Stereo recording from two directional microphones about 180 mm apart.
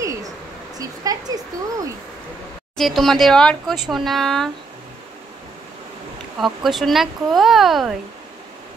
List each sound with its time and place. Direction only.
0.0 s a sound: 20° right (ahead or behind)
0.7 s speech: 20° right (ahead or behind)
2.8 s speech: centre (ahead or behind)
6.3 s speech: centre (ahead or behind)